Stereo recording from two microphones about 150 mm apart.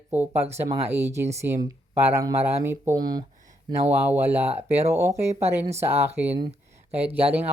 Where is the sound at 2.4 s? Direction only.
15° right (ahead or behind).